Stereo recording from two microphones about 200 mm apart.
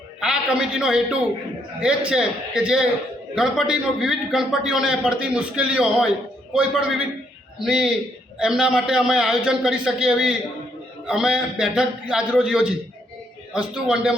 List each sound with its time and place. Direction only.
0.2 s a man's voice: 5° right (ahead or behind)